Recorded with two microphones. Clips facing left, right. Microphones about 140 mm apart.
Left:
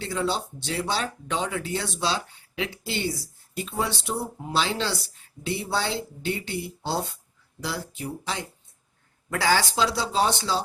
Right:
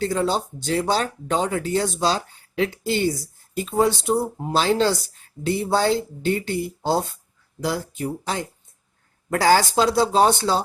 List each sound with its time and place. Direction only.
0.0 s speech: 45° right (ahead or behind)